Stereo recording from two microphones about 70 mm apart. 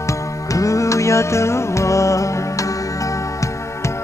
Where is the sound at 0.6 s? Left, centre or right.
Left.